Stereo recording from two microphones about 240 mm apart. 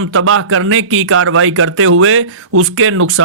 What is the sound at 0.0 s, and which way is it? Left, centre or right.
A man's voice, right.